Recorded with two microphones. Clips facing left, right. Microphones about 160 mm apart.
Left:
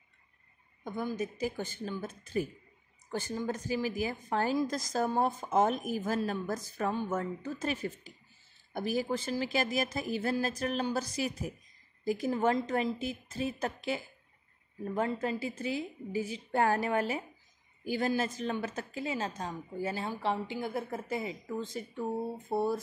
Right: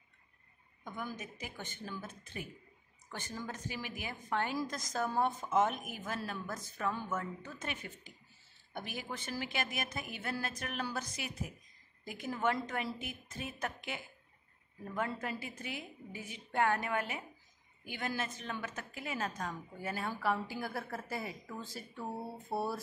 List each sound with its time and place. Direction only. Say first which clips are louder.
1.1 s a woman's voice: left 12 dB; 35° left (ahead or behind); by 22.8 s 20° left (ahead or behind)